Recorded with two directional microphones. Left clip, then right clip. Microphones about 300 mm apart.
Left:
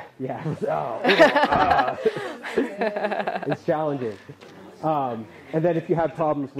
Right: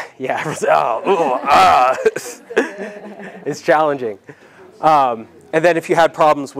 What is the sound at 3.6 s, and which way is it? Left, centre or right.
A man's voice, centre.